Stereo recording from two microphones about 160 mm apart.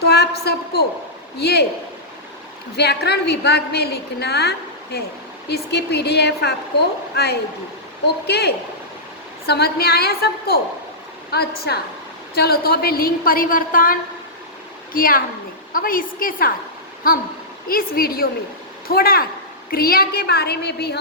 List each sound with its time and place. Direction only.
0.0 s a woman's voice: 90° left
2.7 s a woman's voice: 90° left
11.3 s a woman's voice: 85° left